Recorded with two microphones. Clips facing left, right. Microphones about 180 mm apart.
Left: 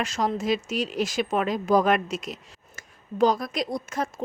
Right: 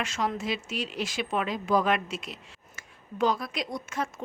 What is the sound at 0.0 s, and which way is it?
Speech, 35° left (ahead or behind).